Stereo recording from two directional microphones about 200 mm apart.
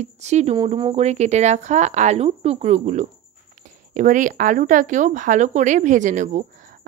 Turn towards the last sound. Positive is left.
turn(degrees=-40)  # may be behind; listen again after turning